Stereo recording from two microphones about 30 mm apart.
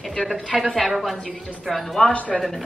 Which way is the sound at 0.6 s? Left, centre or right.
Centre.